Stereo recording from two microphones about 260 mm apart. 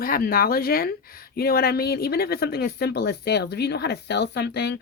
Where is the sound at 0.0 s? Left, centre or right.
Left.